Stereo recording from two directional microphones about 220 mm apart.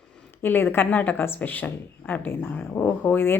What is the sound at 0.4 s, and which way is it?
A woman's voice, 10° left (ahead or behind).